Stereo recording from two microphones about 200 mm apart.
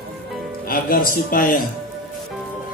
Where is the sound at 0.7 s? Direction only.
45° left (ahead or behind).